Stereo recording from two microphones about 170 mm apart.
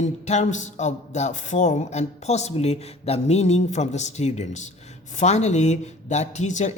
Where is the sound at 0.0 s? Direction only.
45° left (ahead or behind).